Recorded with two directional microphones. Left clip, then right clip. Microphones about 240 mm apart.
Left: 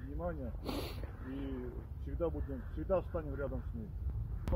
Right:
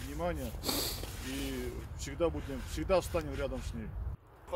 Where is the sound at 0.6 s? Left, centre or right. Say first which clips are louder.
Right 8 dB; centre.